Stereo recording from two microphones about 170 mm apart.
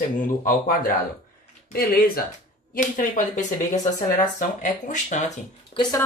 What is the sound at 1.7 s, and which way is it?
Speech, 55° left (ahead or behind).